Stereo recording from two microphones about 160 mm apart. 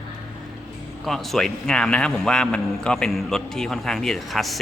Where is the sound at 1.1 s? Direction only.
Centre (ahead or behind).